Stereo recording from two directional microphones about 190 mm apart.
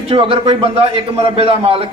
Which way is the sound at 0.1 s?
30° right (ahead or behind).